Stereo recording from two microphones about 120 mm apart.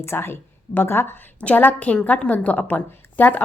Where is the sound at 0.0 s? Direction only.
20° left (ahead or behind).